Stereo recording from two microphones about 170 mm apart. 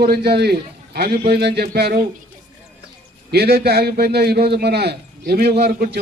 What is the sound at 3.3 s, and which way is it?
A man's voice, 70° right (ahead or behind).